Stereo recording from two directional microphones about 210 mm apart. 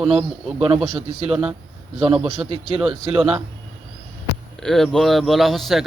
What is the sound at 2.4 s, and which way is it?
Speech, 25° right (ahead or behind).